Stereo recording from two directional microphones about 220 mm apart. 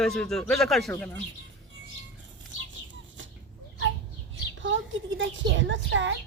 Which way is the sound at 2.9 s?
60° right (ahead or behind).